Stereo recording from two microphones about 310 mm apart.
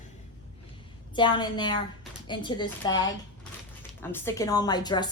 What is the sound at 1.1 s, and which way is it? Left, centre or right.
A woman's voice, centre.